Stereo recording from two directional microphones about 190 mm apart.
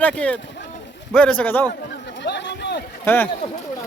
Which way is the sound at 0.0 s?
5° left (ahead or behind).